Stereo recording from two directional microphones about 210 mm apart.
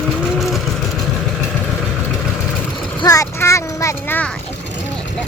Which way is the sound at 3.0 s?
15° left (ahead or behind).